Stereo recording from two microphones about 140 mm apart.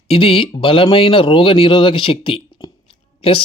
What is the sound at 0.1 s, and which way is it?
Speech, 40° left (ahead or behind).